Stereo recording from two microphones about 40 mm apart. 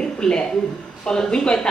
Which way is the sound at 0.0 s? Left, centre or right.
Left.